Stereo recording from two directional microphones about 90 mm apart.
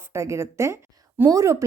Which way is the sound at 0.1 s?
30° right (ahead or behind).